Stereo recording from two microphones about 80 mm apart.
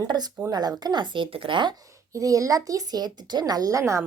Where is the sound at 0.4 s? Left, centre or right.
Right.